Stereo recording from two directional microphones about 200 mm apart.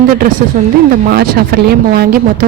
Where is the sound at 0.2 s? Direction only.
45° right (ahead or behind).